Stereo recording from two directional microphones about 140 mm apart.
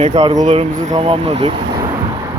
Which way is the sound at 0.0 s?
55° right (ahead or behind).